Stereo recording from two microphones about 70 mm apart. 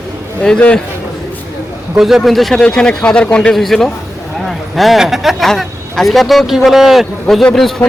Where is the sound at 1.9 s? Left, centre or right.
Centre.